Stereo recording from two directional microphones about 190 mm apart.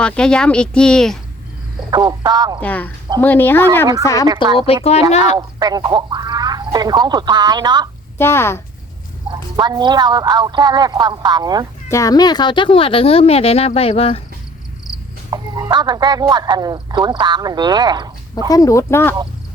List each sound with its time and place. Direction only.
0.0 s speech: 5° left (ahead or behind)
1.9 s speech: 20° right (ahead or behind)
2.6 s speech: 10° left (ahead or behind)
4.5 s speech: 30° left (ahead or behind)
5.4 s speech: 20° right (ahead or behind)
8.2 s speech: 15° left (ahead or behind)
9.3 s speech: 20° right (ahead or behind)
11.9 s speech: 15° left (ahead or behind)
15.3 s speech: 20° right (ahead or behind)
18.4 s speech: 20° left (ahead or behind)